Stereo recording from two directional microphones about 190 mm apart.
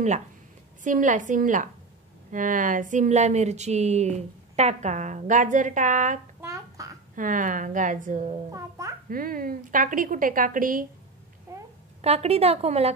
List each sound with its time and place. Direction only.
0.8 s a woman's voice: 40° right (ahead or behind)
6.4 s a sound: 15° right (ahead or behind)
7.2 s a woman's voice: 45° right (ahead or behind)
8.5 s a child's voice: 15° right (ahead or behind)
9.1 s a woman's voice: 50° right (ahead or behind)
12.0 s speech: 35° right (ahead or behind)